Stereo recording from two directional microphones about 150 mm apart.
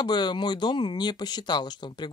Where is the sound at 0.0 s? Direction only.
30° left (ahead or behind).